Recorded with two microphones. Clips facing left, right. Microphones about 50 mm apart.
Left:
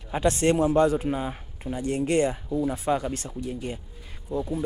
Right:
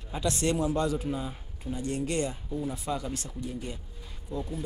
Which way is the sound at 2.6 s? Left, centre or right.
Left.